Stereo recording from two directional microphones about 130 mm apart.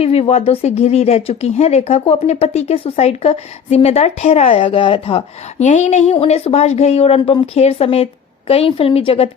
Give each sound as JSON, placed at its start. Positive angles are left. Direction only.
{"t": 0.0, "sound": "speech", "side_deg": 50}
{"t": 5.6, "sound": "a woman's voice", "side_deg": 65}